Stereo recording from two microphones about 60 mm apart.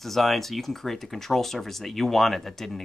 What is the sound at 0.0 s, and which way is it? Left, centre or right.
Speech, centre.